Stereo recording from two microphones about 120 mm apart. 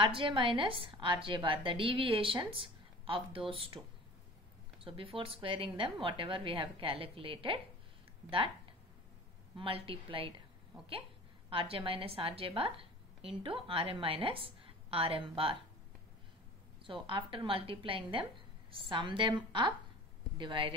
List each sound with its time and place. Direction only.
0.0 s a woman's voice: 45° right (ahead or behind)
11.5 s a woman's voice: 50° right (ahead or behind)
16.8 s a woman's voice: 45° right (ahead or behind)